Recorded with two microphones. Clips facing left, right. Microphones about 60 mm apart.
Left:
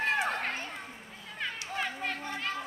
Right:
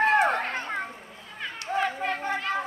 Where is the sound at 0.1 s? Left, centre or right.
Right.